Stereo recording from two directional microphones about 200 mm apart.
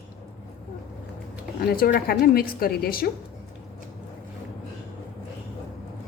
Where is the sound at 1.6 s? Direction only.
45° left (ahead or behind).